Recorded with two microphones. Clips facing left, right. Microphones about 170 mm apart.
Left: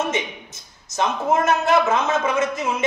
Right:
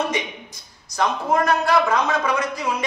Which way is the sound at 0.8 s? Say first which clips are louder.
Left 1 dB; 25° left (ahead or behind).